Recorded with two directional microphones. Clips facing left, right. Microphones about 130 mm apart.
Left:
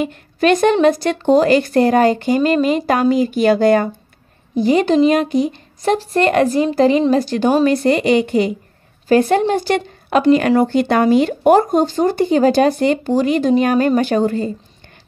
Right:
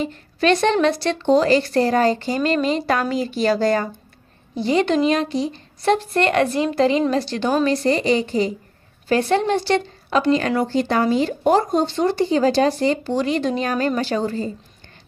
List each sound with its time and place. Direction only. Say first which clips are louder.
0.4 s speech: left 4 dB; 50° left (ahead or behind)
2.4 s speech: left 3 dB; 10° left (ahead or behind)
3.2 s speech: left 6 dB; 50° left (ahead or behind)
4.6 s a woman's voice: left 5 dB; 45° left (ahead or behind); by 8.5 s 60° left (ahead or behind)
9.1 s speech: left 5 dB; 45° left (ahead or behind)